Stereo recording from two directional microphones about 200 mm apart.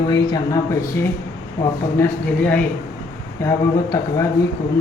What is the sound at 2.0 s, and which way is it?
A woman's voice, 10° left (ahead or behind).